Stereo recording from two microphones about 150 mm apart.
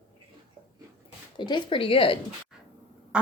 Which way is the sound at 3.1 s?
5° right (ahead or behind).